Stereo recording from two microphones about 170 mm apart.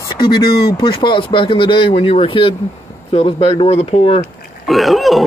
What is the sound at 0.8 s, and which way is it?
Speech, 25° left (ahead or behind).